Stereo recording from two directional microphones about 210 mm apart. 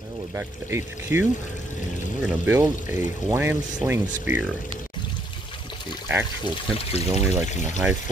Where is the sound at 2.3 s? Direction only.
10° right (ahead or behind).